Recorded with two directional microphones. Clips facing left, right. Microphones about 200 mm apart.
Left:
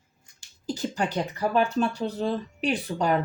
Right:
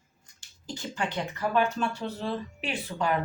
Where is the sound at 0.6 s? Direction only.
40° left (ahead or behind).